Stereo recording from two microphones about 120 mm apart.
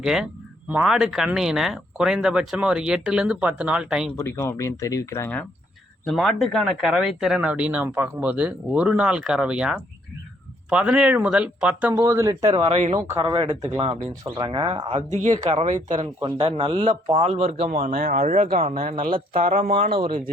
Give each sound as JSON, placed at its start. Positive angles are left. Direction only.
{"t": 0.0, "sound": "speech", "side_deg": -5}
{"t": 4.2, "sound": "speech", "side_deg": 20}
{"t": 6.1, "sound": "speech", "side_deg": 0}
{"t": 11.9, "sound": "speech", "side_deg": -25}
{"t": 12.5, "sound": "speech", "side_deg": -60}
{"t": 13.2, "sound": "speech", "side_deg": -40}
{"t": 14.1, "sound": "speech", "side_deg": -35}
{"t": 15.1, "sound": "speech", "side_deg": -75}
{"t": 16.0, "sound": "speech", "side_deg": -55}
{"t": 17.2, "sound": "speech", "side_deg": -60}
{"t": 19.4, "sound": "speech", "side_deg": -80}